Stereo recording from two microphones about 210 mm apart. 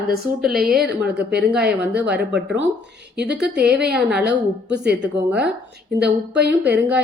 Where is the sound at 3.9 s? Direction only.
5° right (ahead or behind).